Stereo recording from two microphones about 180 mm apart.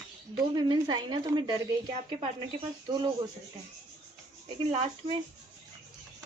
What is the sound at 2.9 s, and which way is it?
Speech, 25° right (ahead or behind).